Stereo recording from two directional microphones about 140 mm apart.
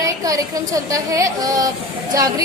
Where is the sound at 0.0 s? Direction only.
25° right (ahead or behind).